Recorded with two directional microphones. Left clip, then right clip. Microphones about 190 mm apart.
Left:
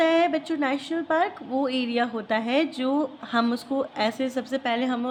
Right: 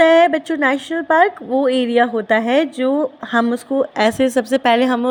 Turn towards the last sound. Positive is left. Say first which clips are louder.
# right 12 dB
turn(degrees=-45)  # may be behind; listen again after turning